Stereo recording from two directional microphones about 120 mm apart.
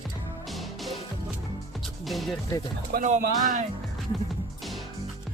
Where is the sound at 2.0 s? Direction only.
Centre (ahead or behind).